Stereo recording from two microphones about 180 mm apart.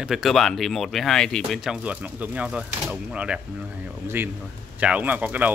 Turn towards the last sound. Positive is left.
turn(degrees=-10)  # may be behind; listen again after turning